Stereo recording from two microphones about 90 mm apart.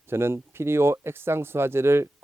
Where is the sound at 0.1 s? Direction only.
25° right (ahead or behind).